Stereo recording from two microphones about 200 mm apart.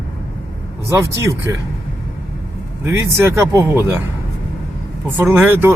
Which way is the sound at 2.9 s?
15° right (ahead or behind).